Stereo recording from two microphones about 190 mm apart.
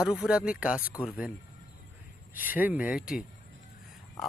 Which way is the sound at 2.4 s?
10° right (ahead or behind).